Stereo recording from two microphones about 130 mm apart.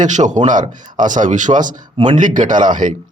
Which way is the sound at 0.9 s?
80° right.